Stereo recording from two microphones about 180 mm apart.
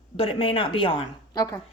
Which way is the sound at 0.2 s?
30° left (ahead or behind).